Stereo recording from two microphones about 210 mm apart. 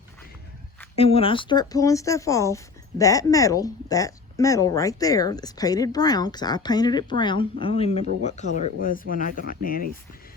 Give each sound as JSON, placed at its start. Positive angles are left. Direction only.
{"t": 0.9, "sound": "speech", "side_deg": 25}